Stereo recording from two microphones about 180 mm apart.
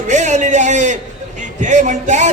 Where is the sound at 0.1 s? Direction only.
40° right (ahead or behind).